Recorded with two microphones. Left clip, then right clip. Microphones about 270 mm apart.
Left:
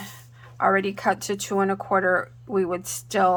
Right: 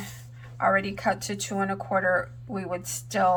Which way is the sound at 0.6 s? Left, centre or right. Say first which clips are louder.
Left 3 dB; left.